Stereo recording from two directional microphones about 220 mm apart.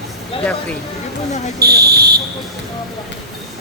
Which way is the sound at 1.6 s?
45° right (ahead or behind).